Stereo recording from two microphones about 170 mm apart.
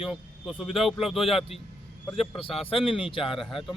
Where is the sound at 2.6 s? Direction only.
35° left (ahead or behind).